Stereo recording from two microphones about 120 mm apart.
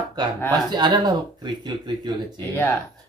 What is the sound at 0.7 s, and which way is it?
Speech, 35° right (ahead or behind).